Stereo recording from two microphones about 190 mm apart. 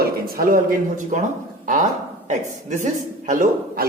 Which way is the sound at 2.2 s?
40° right (ahead or behind).